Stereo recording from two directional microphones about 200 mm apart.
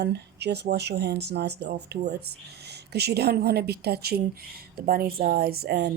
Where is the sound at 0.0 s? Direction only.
55° right (ahead or behind).